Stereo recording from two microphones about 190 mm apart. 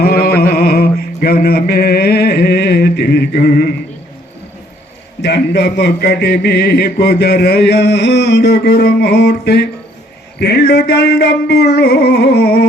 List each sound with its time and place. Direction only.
0.0 s mantra: 55° left (ahead or behind)
5.2 s a man's voice: 60° left (ahead or behind)